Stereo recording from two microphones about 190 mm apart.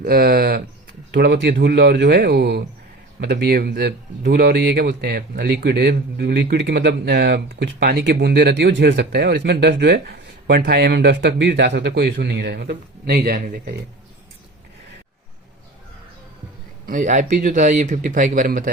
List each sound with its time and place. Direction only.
0.0 s speech: 50° right (ahead or behind)
1.1 s a man's voice: 65° right (ahead or behind)
16.8 s speech: 45° right (ahead or behind)